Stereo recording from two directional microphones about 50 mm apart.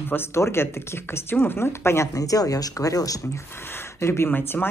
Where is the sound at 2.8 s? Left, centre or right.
Left.